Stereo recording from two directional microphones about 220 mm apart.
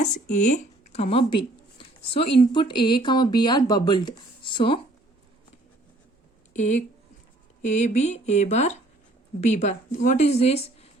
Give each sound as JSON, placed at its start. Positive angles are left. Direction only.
{"t": 0.0, "sound": "a woman's voice", "side_deg": 35}
{"t": 6.6, "sound": "a woman's voice", "side_deg": 35}